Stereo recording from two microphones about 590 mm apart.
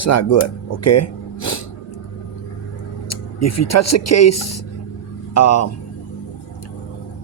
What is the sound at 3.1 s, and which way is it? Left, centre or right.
Speech, left.